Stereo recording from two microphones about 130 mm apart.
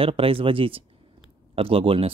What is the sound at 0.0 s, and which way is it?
Speech, 45° right (ahead or behind).